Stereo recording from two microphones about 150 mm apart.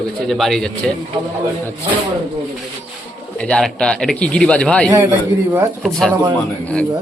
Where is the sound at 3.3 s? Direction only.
5° left (ahead or behind).